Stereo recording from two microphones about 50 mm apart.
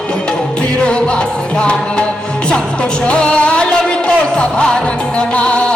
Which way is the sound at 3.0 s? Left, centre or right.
Left.